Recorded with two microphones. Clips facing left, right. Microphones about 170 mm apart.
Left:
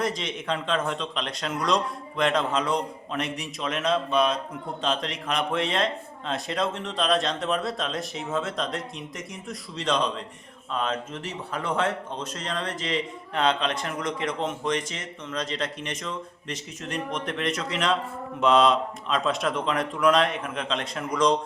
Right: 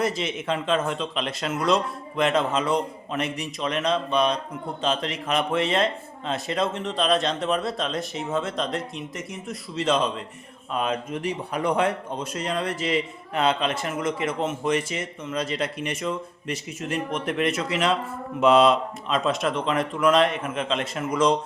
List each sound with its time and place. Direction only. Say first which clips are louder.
0.0 s a man's voice: right 3 dB; 5° right (ahead or behind)